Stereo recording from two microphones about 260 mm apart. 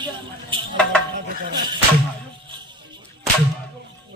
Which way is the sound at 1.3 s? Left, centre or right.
Right.